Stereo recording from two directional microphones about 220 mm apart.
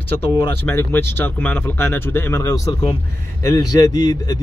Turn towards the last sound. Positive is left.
turn(degrees=15)  # may be behind; listen again after turning